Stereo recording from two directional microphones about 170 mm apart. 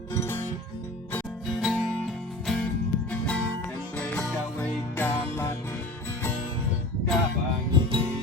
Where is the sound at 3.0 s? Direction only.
5° left (ahead or behind).